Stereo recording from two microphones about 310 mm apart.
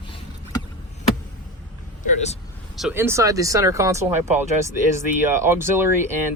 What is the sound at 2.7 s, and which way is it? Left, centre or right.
Speech, centre.